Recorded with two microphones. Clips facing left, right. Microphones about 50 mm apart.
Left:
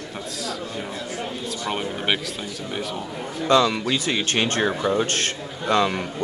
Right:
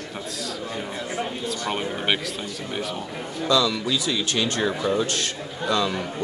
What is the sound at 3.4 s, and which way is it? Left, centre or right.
Speech, left.